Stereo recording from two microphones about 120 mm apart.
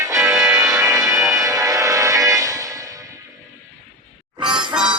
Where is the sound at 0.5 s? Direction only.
30° right (ahead or behind).